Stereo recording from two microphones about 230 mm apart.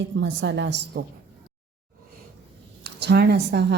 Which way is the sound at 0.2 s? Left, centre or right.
Right.